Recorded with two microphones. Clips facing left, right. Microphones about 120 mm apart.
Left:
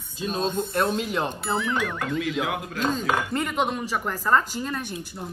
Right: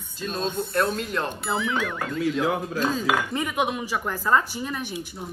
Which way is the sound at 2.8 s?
5° right (ahead or behind).